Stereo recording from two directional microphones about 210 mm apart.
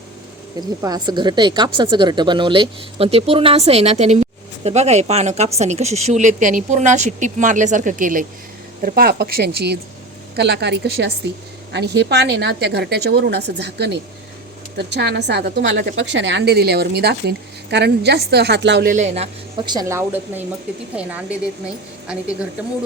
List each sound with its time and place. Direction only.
0.8 s a woman's voice: 20° right (ahead or behind)